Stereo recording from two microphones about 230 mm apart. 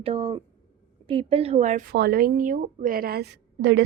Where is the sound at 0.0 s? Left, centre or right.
Right.